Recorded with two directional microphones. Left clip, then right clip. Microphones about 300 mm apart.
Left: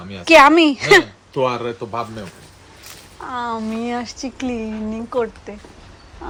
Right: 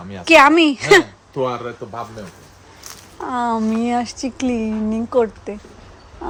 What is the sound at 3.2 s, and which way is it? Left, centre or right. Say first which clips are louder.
Speech: right 4 dB; centre.